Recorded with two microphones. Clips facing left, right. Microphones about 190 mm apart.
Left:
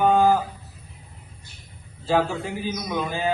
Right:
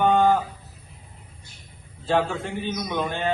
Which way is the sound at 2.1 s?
5° left (ahead or behind).